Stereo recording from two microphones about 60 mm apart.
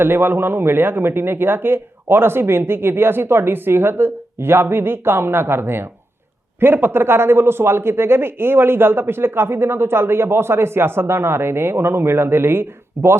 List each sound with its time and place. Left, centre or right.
0.0 s a man's voice: right